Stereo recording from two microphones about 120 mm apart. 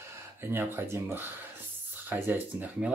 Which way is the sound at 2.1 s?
15° right (ahead or behind).